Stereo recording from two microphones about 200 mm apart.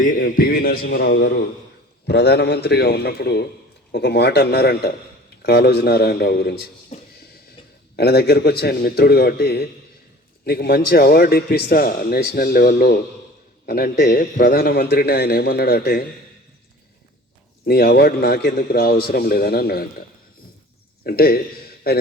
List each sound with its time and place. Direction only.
0.1 s a man's voice: 45° left (ahead or behind)
6.9 s a sound: 30° left (ahead or behind)
7.9 s a man's voice: 55° left (ahead or behind)
17.7 s a man's voice: 50° left (ahead or behind)
21.0 s a man's voice: 50° left (ahead or behind)